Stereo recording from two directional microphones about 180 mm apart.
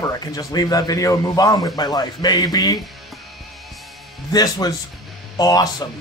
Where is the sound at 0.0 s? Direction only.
20° left (ahead or behind).